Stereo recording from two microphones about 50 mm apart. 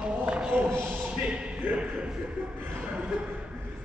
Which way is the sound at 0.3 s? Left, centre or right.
Centre.